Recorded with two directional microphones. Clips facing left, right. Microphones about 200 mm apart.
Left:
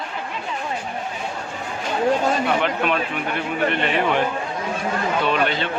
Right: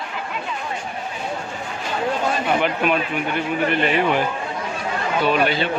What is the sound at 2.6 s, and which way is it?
Speech, 5° right (ahead or behind).